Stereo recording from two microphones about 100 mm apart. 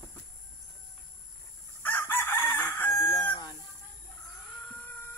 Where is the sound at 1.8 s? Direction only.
20° left (ahead or behind).